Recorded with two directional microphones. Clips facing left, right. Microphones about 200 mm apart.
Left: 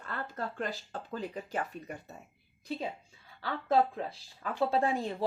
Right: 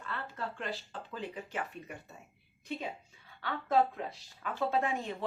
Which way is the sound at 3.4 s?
30° left (ahead or behind).